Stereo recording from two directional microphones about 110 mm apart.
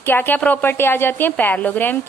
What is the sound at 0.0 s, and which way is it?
A woman's voice, 20° left (ahead or behind).